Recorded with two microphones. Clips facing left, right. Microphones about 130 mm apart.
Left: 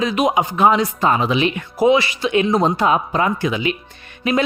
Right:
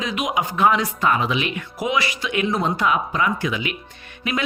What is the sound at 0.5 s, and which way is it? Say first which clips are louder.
Speech: left 3 dB; 20° left (ahead or behind).